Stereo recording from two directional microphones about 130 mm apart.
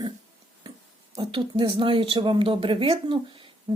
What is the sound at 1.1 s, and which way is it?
Speech, 35° right (ahead or behind).